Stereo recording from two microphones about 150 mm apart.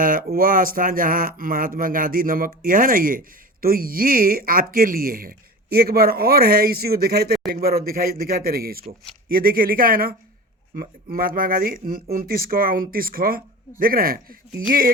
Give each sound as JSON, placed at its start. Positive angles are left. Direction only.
{"t": 0.0, "sound": "speech", "side_deg": -70}